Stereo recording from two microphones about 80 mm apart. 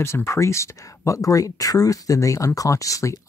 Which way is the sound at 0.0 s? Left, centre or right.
Left.